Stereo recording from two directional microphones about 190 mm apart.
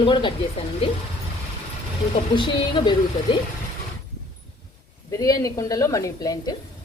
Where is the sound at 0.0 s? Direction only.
25° left (ahead or behind).